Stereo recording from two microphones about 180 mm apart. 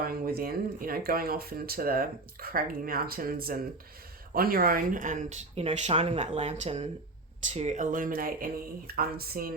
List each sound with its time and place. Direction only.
0.0 s speech: 55° right (ahead or behind)